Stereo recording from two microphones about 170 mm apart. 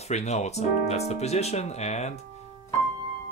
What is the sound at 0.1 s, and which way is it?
Speech, 40° left (ahead or behind).